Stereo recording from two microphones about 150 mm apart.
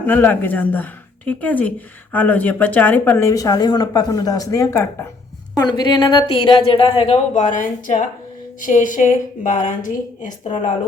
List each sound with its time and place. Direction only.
0.0 s a woman's voice: 10° left (ahead or behind); by 7.2 s 40° left (ahead or behind)
7.3 s a woman's voice: 60° left (ahead or behind)